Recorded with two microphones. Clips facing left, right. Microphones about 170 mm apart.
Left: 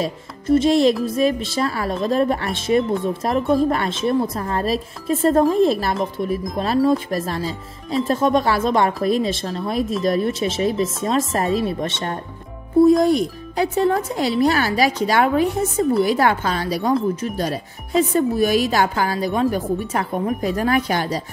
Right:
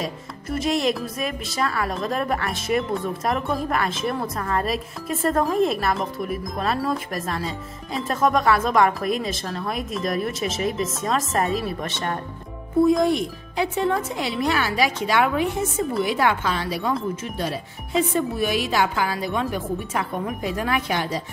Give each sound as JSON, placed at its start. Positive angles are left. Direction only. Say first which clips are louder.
{"t": 0.0, "sound": "speech", "louder": "left 5 dB", "side_deg": 30}